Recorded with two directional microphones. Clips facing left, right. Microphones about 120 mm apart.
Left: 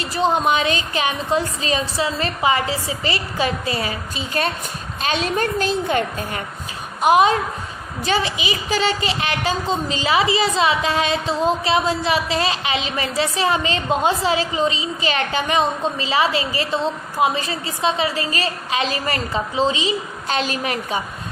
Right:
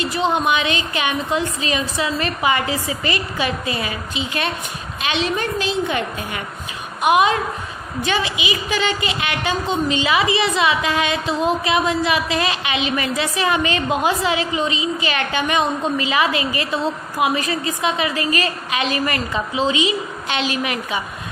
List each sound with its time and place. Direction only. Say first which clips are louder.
0.0 s a woman's voice: even; 35° left (ahead or behind)